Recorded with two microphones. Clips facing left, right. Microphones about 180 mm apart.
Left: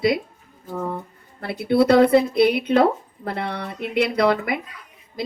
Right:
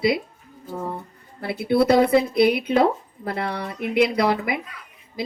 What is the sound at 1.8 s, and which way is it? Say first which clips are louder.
Speech: left 3 dB; 5° right (ahead or behind).